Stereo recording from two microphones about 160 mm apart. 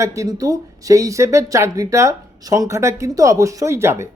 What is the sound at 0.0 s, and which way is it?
Speech, 20° right (ahead or behind).